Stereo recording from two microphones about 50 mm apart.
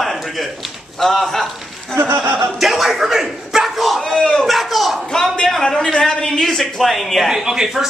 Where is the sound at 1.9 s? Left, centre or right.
Right.